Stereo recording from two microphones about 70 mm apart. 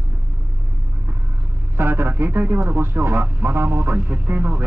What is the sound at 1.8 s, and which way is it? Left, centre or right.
A man's voice, right.